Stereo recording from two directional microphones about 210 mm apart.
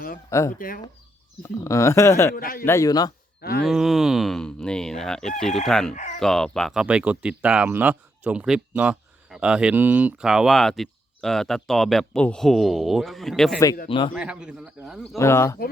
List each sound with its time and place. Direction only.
0.3 s speech: 15° left (ahead or behind)
2.3 s a man's voice: 45° left (ahead or behind)
2.6 s speech: 15° left (ahead or behind)
3.4 s a man's voice: 45° left (ahead or behind)
3.7 s speech: centre (ahead or behind)
5.9 s speech: 35° left (ahead or behind)
6.1 s speech: 5° left (ahead or behind)
13.8 s a man's voice: 25° left (ahead or behind)
14.2 s speech: 5° right (ahead or behind)
15.0 s speech: 10° left (ahead or behind)